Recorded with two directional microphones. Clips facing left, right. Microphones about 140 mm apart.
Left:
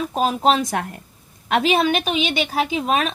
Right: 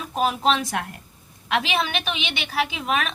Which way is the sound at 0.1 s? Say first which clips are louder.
Left 2 dB; 35° left (ahead or behind).